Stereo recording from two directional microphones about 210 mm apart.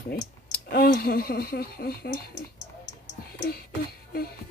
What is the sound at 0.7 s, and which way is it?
Speech, 45° left (ahead or behind).